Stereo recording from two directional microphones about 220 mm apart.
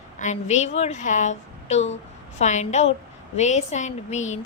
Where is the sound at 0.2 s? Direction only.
30° left (ahead or behind).